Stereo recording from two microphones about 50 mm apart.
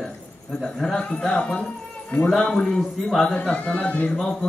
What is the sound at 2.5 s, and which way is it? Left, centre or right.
Speech, centre.